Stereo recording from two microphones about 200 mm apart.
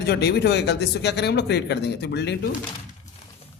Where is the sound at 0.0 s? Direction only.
55° left (ahead or behind).